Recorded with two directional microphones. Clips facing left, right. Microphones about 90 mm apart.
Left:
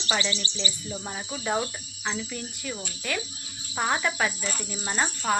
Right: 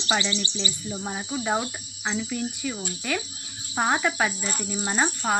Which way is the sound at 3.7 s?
20° right (ahead or behind).